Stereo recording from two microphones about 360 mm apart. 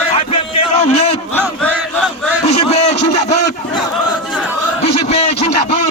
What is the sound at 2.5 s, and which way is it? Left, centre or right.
Speech, centre.